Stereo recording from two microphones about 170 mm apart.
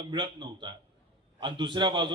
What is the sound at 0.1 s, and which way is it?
A man's voice, 25° right (ahead or behind).